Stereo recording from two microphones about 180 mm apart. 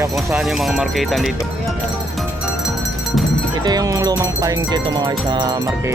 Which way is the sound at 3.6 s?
20° right (ahead or behind).